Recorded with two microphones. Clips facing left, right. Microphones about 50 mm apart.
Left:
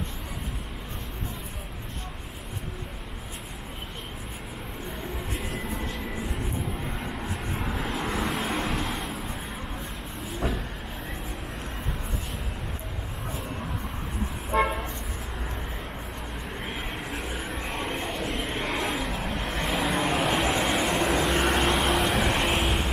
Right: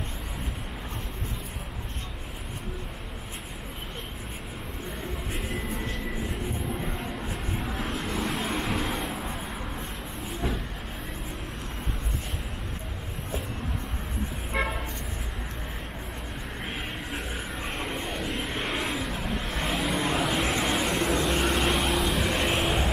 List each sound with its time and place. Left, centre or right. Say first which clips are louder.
7.6 s vehicle: left 3 dB; centre
16.6 s vehicle: even; centre